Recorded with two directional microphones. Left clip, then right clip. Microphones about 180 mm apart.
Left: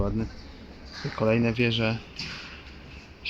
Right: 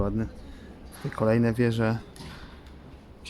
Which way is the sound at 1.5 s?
20° right (ahead or behind).